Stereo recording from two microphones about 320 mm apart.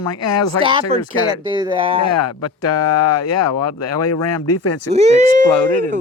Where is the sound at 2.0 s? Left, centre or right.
Left.